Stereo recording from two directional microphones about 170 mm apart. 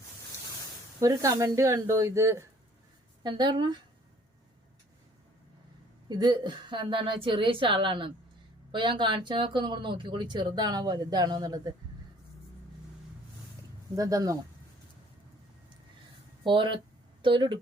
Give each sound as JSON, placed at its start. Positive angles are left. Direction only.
{"t": 0.9, "sound": "speech", "side_deg": -20}
{"t": 3.2, "sound": "speech", "side_deg": -25}
{"t": 6.1, "sound": "speech", "side_deg": -25}
{"t": 13.9, "sound": "speech", "side_deg": -20}
{"t": 16.4, "sound": "speech", "side_deg": -30}